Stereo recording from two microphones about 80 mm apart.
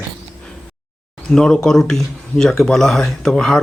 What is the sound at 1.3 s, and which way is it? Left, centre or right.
Speech, centre.